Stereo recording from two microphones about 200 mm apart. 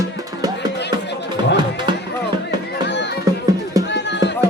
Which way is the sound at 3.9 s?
60° left (ahead or behind).